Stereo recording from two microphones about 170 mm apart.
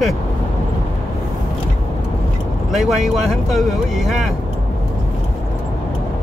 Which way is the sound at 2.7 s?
Centre (ahead or behind).